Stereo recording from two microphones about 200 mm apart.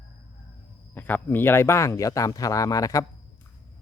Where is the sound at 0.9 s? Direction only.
10° left (ahead or behind).